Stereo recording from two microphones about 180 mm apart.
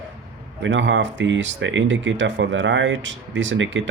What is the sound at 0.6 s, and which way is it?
Speech, 90° right.